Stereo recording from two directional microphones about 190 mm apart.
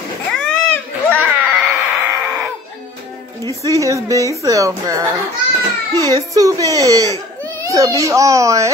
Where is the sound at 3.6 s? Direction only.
15° right (ahead or behind).